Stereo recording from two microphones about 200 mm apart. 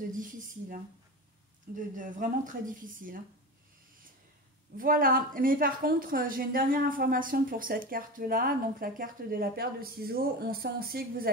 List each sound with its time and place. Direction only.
0.1 s a woman's voice: 40° right (ahead or behind)
2.0 s a woman's voice: 40° right (ahead or behind)
4.7 s a woman's voice: 45° right (ahead or behind)